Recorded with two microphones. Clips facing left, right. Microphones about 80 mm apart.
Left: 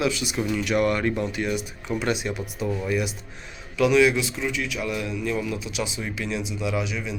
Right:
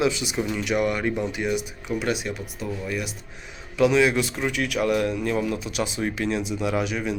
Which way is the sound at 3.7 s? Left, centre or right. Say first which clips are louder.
Even; right.